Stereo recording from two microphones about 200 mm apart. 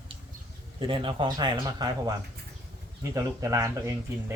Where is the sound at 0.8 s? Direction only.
25° right (ahead or behind).